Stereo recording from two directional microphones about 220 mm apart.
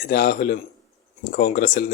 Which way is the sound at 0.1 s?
40° left (ahead or behind).